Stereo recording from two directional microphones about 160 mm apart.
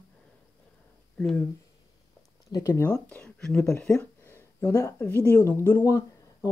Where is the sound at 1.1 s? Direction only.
5° left (ahead or behind).